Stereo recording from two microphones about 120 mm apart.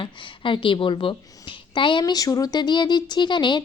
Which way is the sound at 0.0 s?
45° left (ahead or behind).